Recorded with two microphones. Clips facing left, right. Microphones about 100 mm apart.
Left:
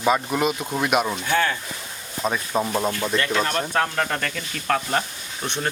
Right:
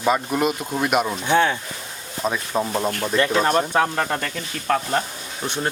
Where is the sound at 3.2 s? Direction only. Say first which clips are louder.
Right 7 dB; 25° right (ahead or behind).